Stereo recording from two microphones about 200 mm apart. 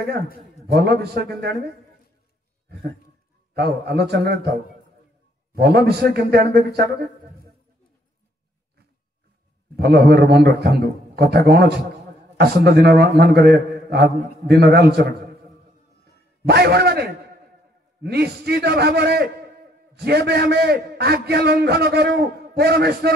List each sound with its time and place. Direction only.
0.7 s a man's voice: 55° right (ahead or behind)
3.5 s a man's voice: 55° right (ahead or behind)
5.6 s a man's voice: 55° right (ahead or behind)
9.8 s a man's voice: 55° right (ahead or behind)
16.4 s a man's voice: 55° right (ahead or behind)